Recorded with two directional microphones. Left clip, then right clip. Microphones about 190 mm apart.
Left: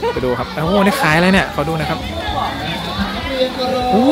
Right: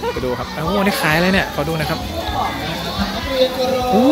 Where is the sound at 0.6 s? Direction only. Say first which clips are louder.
Left 3 dB; 15° left (ahead or behind).